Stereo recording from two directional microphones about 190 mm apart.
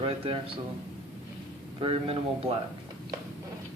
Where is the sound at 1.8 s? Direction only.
30° right (ahead or behind).